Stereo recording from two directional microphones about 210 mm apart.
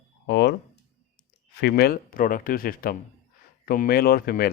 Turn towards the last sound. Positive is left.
turn(degrees=45)  # may be behind; listen again after turning